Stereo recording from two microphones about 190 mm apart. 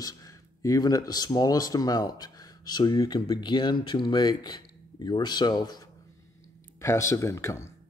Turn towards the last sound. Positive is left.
turn(degrees=15)  # may be behind; listen again after turning